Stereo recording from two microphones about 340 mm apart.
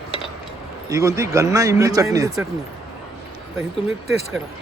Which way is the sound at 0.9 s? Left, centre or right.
Centre.